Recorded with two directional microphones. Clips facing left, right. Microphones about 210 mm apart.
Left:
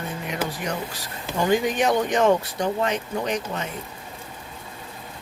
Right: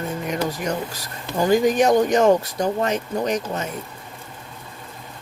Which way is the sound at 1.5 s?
40° right (ahead or behind).